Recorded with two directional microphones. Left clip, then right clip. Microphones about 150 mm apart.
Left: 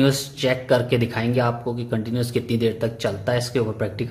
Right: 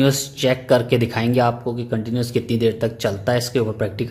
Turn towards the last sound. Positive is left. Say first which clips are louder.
# right 2 dB
turn(degrees=-15)  # may be behind; listen again after turning